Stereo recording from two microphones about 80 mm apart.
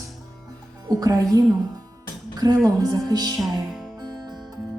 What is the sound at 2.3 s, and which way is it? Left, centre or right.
Music, right.